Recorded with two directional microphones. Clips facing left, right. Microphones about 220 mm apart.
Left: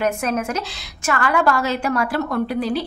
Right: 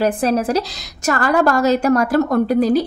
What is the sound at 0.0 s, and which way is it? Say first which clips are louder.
A woman's voice: right 5 dB; 35° right (ahead or behind).